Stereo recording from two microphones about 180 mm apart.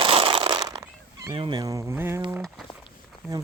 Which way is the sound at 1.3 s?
25° right (ahead or behind).